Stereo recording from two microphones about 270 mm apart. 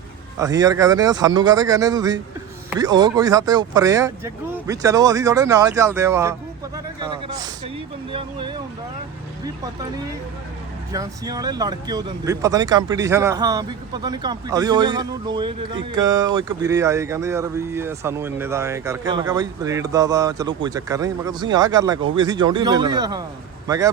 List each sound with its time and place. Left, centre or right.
0.3 s speech: centre
10.9 s a man's voice: centre